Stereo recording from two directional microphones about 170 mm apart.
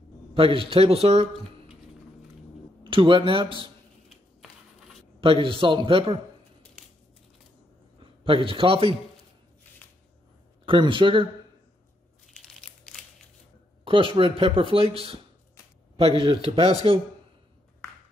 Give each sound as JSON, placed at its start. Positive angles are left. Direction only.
{"t": 0.3, "sound": "speech", "side_deg": -30}
{"t": 2.8, "sound": "speech", "side_deg": -30}
{"t": 4.1, "sound": "a sound", "side_deg": 0}
{"t": 5.2, "sound": "speech", "side_deg": -30}
{"t": 8.0, "sound": "a man's voice", "side_deg": -30}
{"t": 10.6, "sound": "speech", "side_deg": -30}
{"t": 13.8, "sound": "speech", "side_deg": -30}